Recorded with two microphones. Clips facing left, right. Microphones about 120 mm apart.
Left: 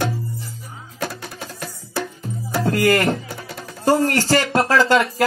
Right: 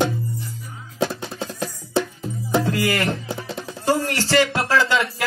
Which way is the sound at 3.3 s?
20° right (ahead or behind).